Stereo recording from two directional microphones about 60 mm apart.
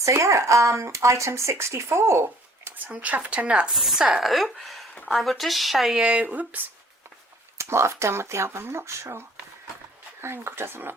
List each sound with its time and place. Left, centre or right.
0.0 s speech: right
2.6 s speech: right
3.7 s speech: centre
6.0 s speech: right
7.6 s speech: right